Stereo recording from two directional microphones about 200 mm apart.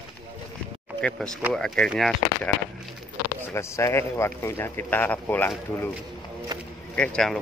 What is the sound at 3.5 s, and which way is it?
A man's voice, 15° left (ahead or behind).